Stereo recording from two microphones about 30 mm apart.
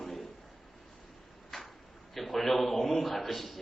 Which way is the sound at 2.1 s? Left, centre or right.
Centre.